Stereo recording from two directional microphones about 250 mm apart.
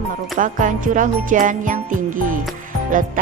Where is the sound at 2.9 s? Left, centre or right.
Right.